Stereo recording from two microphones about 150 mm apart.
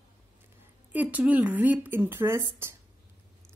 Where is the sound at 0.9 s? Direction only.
10° right (ahead or behind).